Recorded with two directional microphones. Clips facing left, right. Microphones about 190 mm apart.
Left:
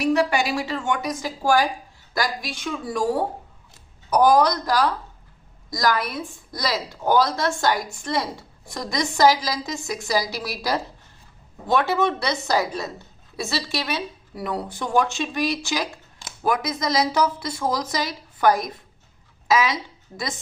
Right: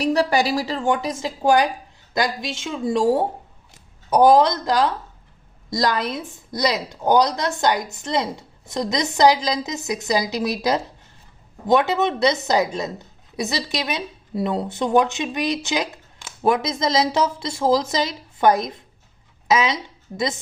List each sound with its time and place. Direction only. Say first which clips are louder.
0.0 s a woman's voice: right 1 dB; 35° right (ahead or behind); by 20.3 s 20° right (ahead or behind)